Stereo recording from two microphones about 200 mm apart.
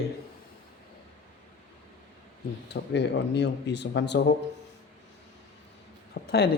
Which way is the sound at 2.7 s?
60° left (ahead or behind).